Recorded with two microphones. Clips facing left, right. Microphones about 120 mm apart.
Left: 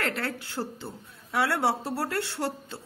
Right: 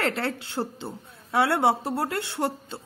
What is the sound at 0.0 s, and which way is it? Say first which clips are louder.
A woman's voice: right 4 dB; 25° right (ahead or behind).